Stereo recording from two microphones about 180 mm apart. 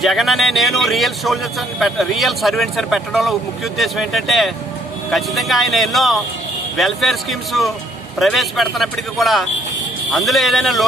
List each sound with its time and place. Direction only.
0.0 s a man's voice: centre (ahead or behind)